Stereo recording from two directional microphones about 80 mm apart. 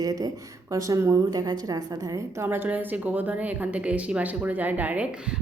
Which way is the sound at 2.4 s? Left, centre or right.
Right.